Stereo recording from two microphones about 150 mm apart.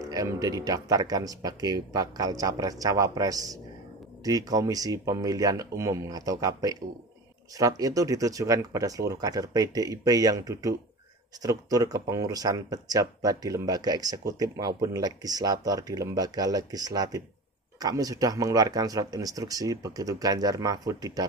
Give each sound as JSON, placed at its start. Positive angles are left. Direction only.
{"t": 0.1, "sound": "speech", "side_deg": -25}